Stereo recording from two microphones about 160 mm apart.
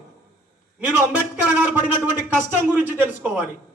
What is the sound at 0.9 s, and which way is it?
Music, 10° right (ahead or behind).